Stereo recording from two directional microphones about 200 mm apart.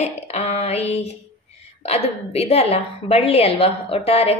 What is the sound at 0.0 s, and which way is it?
A woman's voice, 30° left (ahead or behind).